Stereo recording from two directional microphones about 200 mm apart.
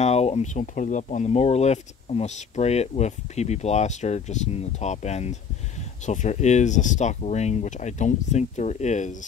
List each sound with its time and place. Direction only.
0.0 s speech: 30° left (ahead or behind)